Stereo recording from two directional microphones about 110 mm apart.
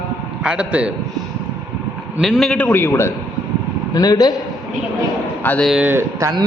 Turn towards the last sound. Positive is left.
turn(degrees=-25)  # may be behind; listen again after turning